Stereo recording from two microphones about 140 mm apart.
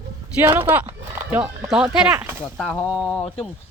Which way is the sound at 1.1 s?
15° right (ahead or behind).